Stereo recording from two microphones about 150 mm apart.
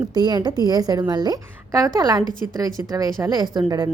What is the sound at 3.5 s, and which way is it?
Speech, 25° right (ahead or behind).